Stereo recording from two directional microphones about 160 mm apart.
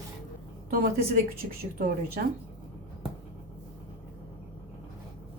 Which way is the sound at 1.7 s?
70° right (ahead or behind).